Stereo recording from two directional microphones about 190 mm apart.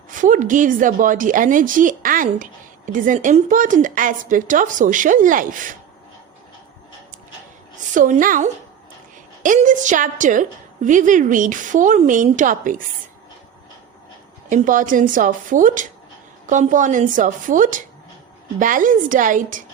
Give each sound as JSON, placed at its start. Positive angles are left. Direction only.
{"t": 0.2, "sound": "a woman's voice", "side_deg": -45}
{"t": 7.9, "sound": "a woman's voice", "side_deg": -45}
{"t": 14.5, "sound": "a woman's voice", "side_deg": -45}